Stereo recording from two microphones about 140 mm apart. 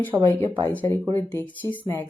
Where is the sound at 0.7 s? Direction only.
15° left (ahead or behind).